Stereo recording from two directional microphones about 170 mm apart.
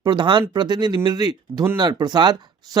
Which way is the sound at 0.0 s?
25° right (ahead or behind).